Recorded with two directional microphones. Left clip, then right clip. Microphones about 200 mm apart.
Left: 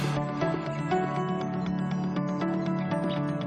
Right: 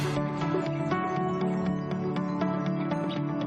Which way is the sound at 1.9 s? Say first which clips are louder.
Right 1 dB; centre (ahead or behind).